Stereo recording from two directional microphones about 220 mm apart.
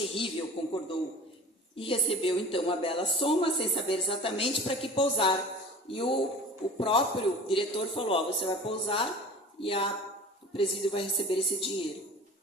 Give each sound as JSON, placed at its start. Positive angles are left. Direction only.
{"t": 0.0, "sound": "speech", "side_deg": 25}